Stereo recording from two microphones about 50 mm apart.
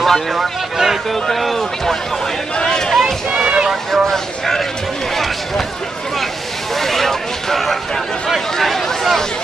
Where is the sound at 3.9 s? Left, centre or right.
Centre.